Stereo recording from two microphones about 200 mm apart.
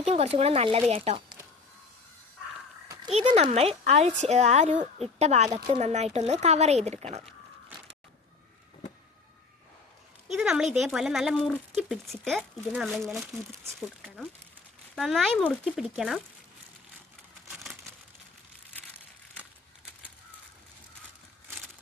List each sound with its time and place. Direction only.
0.0 s speech: 30° right (ahead or behind)
3.1 s speech: 35° right (ahead or behind)
5.5 s speech: 20° right (ahead or behind)
5.8 s speech: 35° right (ahead or behind)
10.3 s speech: 5° right (ahead or behind)
17.5 s crumpling: centre (ahead or behind)